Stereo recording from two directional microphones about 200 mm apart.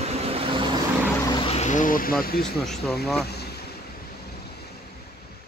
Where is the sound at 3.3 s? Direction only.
55° left (ahead or behind).